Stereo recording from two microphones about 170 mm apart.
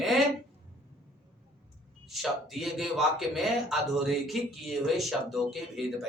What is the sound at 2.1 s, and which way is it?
A man's voice, centre (ahead or behind).